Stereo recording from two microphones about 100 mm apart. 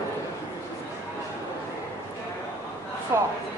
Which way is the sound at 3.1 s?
30° right (ahead or behind).